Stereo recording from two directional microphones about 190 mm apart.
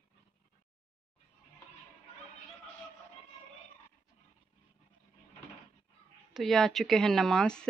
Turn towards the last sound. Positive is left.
turn(degrees=5)  # may be behind; listen again after turning